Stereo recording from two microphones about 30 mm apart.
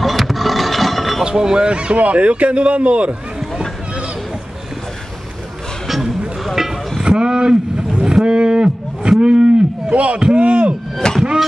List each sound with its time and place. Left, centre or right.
0.0 s a sound: centre
1.3 s speech: right
1.7 s speech: right
2.0 s a man's voice: right
6.4 s vehicle: centre
7.0 s vehicle: right
8.3 s speech: right
9.8 s a man's voice: right
11.0 s music: left